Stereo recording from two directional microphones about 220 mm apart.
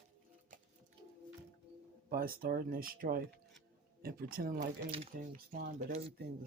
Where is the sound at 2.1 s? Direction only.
40° right (ahead or behind).